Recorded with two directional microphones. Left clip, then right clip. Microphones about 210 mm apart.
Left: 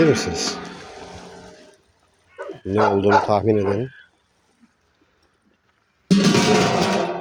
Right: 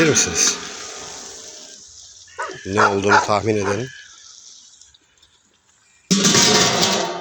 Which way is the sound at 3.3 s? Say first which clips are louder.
Left 1 dB; 20° left (ahead or behind).